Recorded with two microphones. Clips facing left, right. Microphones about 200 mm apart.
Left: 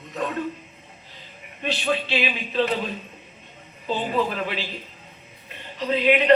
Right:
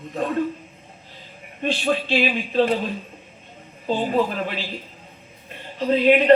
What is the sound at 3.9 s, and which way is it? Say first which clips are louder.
A man's voice: right 3 dB; 45° right (ahead or behind).